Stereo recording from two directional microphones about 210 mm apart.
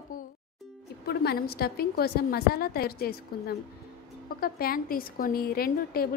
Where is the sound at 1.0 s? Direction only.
50° left (ahead or behind).